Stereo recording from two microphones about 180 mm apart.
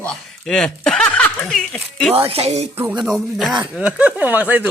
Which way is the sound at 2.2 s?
35° right (ahead or behind).